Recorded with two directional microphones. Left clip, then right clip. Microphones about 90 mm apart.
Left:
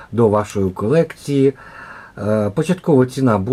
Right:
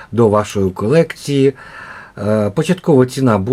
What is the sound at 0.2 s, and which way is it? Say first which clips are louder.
Speech: right 3 dB; 25° right (ahead or behind).